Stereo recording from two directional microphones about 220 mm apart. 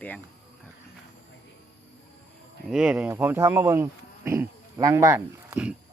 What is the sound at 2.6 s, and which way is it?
Speech, 5° right (ahead or behind).